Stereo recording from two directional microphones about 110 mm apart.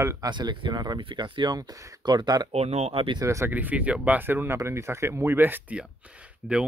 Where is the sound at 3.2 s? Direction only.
25° right (ahead or behind).